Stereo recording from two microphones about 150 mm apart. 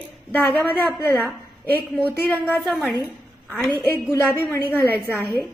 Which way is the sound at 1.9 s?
10° right (ahead or behind).